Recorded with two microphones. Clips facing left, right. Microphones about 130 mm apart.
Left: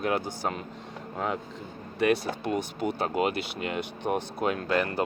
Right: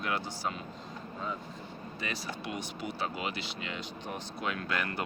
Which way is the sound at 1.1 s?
75° left (ahead or behind).